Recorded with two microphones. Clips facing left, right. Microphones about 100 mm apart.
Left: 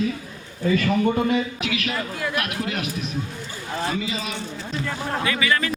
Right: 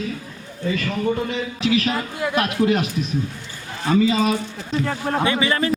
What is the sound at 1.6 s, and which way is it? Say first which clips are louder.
A man's voice: right 6 dB; 30° right (ahead or behind).